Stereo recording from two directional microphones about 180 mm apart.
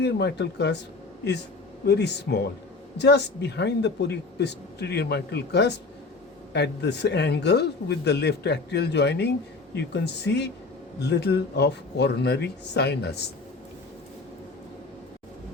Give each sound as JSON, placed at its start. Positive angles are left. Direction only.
{"t": 0.0, "sound": "speech", "side_deg": 70}
{"t": 1.9, "sound": "speech", "side_deg": 70}